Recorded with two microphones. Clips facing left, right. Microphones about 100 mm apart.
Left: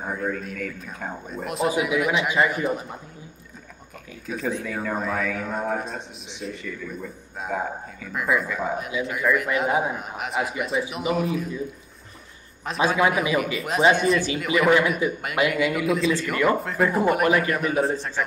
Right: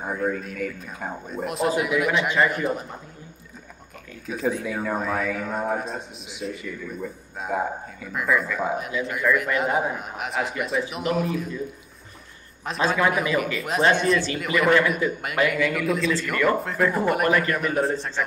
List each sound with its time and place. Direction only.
0.0 s a man's voice: 5° right (ahead or behind)
4.3 s a man's voice: centre (ahead or behind)
12.8 s a man's voice: 10° left (ahead or behind)
15.4 s a man's voice: 15° left (ahead or behind)
15.7 s a man's voice: centre (ahead or behind)